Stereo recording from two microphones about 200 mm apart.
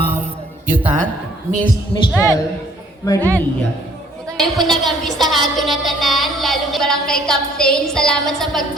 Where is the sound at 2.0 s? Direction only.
15° left (ahead or behind).